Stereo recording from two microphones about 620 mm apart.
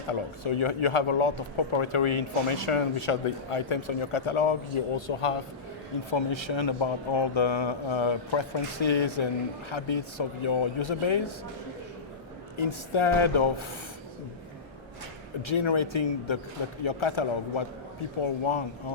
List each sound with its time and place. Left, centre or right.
0.1 s speech: left
6.1 s speech: left
12.5 s speech: left
15.4 s speech: left